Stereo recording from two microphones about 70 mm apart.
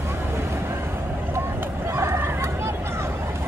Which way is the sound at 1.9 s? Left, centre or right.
Right.